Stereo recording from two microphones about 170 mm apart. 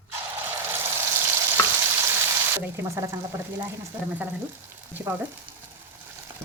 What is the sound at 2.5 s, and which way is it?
Speech, 15° right (ahead or behind).